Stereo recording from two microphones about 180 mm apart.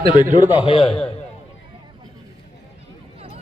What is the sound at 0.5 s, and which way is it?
Speech, 30° left (ahead or behind).